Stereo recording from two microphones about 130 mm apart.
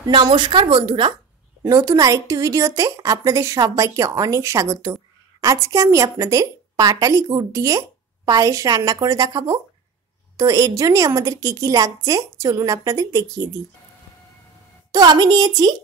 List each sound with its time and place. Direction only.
0.0 s a woman's voice: 35° right (ahead or behind)
1.6 s a woman's voice: 25° right (ahead or behind)
14.9 s a woman's voice: 30° right (ahead or behind)